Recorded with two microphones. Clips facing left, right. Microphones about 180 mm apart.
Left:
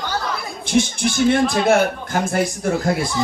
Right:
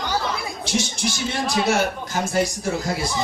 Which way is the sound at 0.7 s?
55° left (ahead or behind).